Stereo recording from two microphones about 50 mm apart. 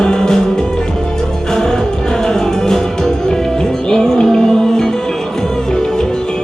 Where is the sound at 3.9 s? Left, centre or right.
Centre.